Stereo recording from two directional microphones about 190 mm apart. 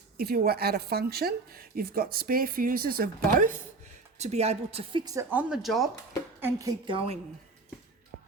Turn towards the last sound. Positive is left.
turn(degrees=-25)  # may be behind; listen again after turning